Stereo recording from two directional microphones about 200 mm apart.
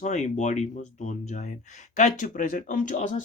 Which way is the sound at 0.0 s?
35° left (ahead or behind).